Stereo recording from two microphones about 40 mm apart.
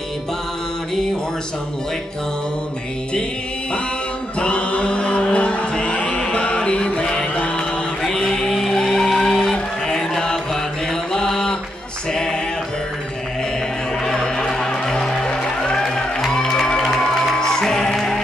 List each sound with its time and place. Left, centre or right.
4.4 s chant: left
8.0 s music: centre
12.1 s a sound: centre
14.0 s music: centre